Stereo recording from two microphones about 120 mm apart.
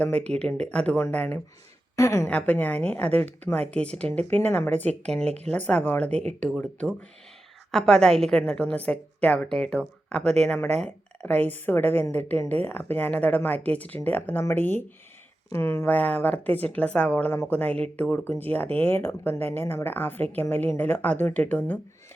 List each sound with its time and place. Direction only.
0.0 s speech: 10° left (ahead or behind)
2.0 s a woman's voice: 25° left (ahead or behind)
2.2 s speech: 10° left (ahead or behind)